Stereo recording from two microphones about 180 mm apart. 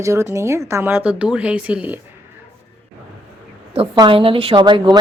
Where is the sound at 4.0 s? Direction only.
30° right (ahead or behind).